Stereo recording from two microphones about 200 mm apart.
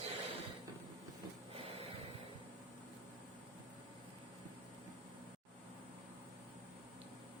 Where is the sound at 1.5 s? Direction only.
30° right (ahead or behind).